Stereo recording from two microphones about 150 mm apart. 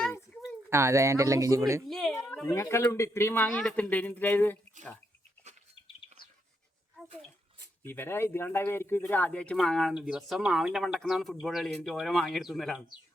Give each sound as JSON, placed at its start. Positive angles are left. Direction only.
{"t": 0.7, "sound": "speech", "side_deg": -20}
{"t": 1.9, "sound": "a sound", "side_deg": 0}
{"t": 2.5, "sound": "speech", "side_deg": 15}
{"t": 7.9, "sound": "speech", "side_deg": 15}